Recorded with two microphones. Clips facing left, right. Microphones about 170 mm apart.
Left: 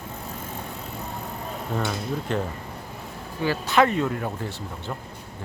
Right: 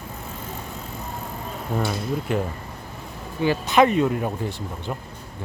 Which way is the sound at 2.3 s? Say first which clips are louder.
Right 2 dB; 10° right (ahead or behind).